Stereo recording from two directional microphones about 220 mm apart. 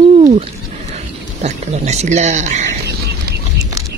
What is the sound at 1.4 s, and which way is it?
Speech, 30° right (ahead or behind).